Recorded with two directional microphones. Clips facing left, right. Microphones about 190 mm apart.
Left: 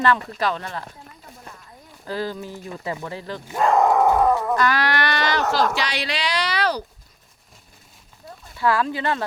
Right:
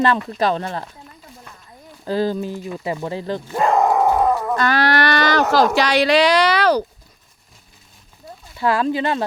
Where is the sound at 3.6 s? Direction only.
10° right (ahead or behind).